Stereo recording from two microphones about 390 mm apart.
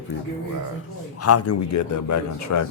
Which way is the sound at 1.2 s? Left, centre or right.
Left.